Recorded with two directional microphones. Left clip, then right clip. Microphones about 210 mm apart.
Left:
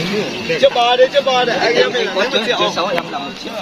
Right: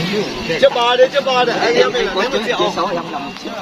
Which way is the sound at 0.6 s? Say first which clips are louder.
Even; 50° right (ahead or behind).